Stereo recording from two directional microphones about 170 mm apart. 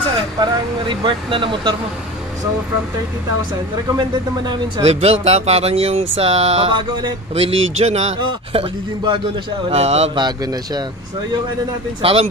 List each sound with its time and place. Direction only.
0.4 s speech: 25° right (ahead or behind)
3.9 s speech: 25° right (ahead or behind)
4.8 s speech: 40° right (ahead or behind)
8.2 s speech: 25° right (ahead or behind)
10.2 s speech: 25° right (ahead or behind)
12.0 s speech: 35° right (ahead or behind)